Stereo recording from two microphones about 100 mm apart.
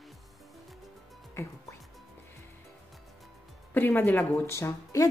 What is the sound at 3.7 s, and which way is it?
A woman's voice, 20° left (ahead or behind).